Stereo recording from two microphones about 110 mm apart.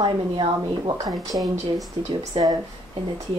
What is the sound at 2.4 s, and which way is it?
Speech, 55° right (ahead or behind).